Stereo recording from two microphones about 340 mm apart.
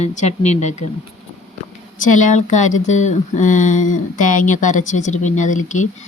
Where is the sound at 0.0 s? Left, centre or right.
Centre.